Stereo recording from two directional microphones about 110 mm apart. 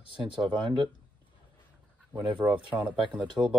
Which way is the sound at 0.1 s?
50° right (ahead or behind).